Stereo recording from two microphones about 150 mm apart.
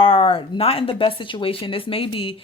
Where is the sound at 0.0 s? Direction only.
35° left (ahead or behind).